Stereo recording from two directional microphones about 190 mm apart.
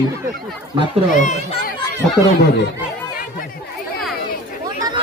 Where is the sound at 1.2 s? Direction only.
40° left (ahead or behind).